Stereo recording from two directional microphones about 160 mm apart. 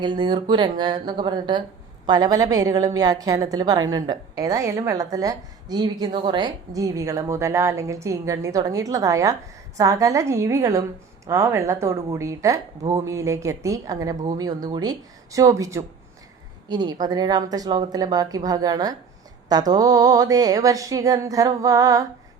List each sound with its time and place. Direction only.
0.0 s a woman's voice: 30° right (ahead or behind)